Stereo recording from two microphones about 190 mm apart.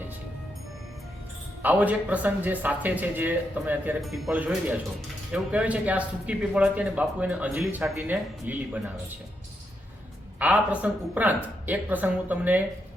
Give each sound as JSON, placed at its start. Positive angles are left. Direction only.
{"t": 1.6, "sound": "speech", "side_deg": -10}
{"t": 10.4, "sound": "speech", "side_deg": -5}